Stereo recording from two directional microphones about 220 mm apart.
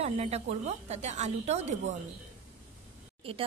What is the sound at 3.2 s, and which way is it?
Speech, 25° right (ahead or behind).